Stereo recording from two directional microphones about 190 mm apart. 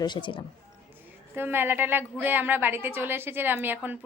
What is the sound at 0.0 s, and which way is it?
Speech, 25° left (ahead or behind).